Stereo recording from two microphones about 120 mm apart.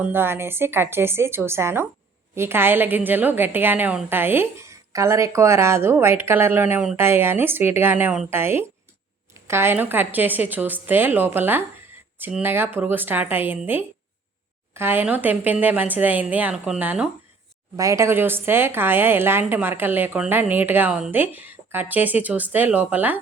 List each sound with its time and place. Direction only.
0.0 s a woman's voice: 20° right (ahead or behind)
17.7 s a woman's voice: 25° right (ahead or behind)